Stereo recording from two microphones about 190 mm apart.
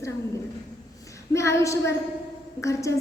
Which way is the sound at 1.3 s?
15° left (ahead or behind).